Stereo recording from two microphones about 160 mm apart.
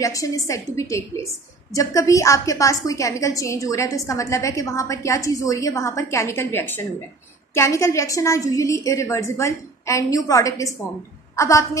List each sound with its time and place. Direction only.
0.0 s a woman's voice: 20° left (ahead or behind)